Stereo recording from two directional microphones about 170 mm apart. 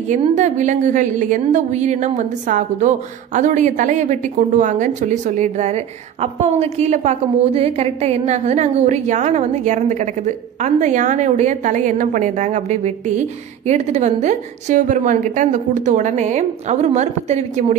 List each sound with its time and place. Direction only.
0.1 s a woman's voice: 45° right (ahead or behind)